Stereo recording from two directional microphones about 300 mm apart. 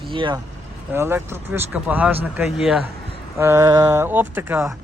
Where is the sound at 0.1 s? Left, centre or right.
Centre.